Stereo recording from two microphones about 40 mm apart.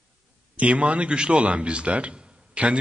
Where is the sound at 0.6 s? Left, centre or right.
Right.